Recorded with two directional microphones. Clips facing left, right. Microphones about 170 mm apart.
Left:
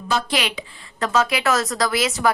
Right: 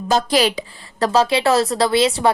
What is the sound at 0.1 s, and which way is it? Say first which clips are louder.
A woman's voice: right 6 dB; 40° right (ahead or behind).